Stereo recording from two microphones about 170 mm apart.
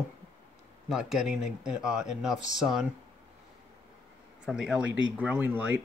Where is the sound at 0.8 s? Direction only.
5° right (ahead or behind).